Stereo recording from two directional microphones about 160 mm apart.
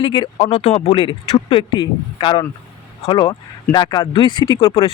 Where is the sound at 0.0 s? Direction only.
35° left (ahead or behind).